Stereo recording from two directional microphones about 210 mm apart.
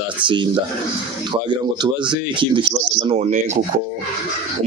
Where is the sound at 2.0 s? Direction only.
25° right (ahead or behind).